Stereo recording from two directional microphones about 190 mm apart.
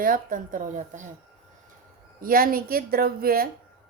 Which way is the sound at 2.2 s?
50° right (ahead or behind).